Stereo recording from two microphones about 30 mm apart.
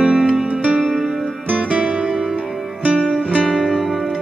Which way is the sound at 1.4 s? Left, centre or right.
Right.